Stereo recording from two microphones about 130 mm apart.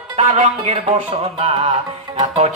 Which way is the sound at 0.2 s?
60° right (ahead or behind).